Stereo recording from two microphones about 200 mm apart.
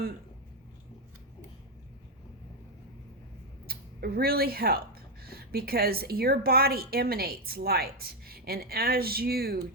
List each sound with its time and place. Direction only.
3.7 s a woman's voice: 50° right (ahead or behind)